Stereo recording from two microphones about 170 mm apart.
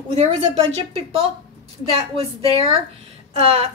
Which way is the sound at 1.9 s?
35° right (ahead or behind).